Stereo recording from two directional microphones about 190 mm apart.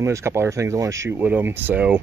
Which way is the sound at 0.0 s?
15° right (ahead or behind).